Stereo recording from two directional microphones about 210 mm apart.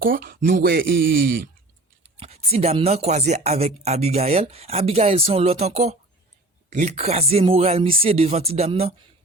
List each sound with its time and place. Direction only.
0.0 s speech: 45° right (ahead or behind)
2.1 s speech: 30° right (ahead or behind)